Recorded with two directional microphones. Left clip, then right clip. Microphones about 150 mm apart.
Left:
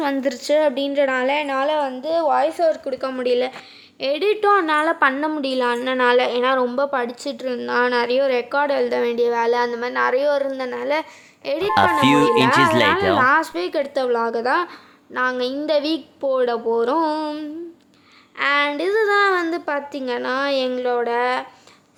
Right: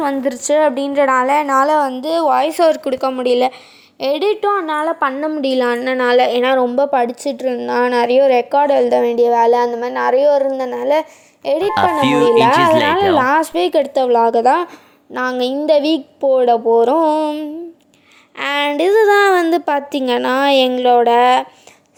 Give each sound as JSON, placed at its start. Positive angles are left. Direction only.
{"t": 0.0, "sound": "a woman's voice", "side_deg": -10}
{"t": 1.3, "sound": "a woman's voice", "side_deg": -40}
{"t": 3.1, "sound": "a woman's voice", "side_deg": -30}
{"t": 4.4, "sound": "a woman's voice", "side_deg": -5}
{"t": 5.4, "sound": "speech", "side_deg": -30}
{"t": 9.6, "sound": "a woman's voice", "side_deg": -10}
{"t": 9.9, "sound": "speech", "side_deg": -20}
{"t": 11.9, "sound": "speech", "side_deg": 0}
{"t": 13.1, "sound": "a woman's voice", "side_deg": -35}
{"t": 18.3, "sound": "a woman's voice", "side_deg": -40}